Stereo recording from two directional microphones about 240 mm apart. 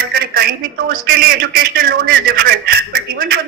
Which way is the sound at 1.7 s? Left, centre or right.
Right.